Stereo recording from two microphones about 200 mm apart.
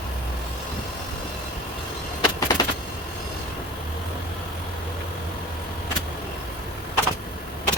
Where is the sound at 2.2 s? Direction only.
20° left (ahead or behind).